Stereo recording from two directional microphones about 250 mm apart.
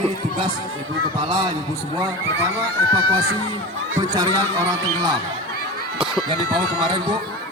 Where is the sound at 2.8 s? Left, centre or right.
Right.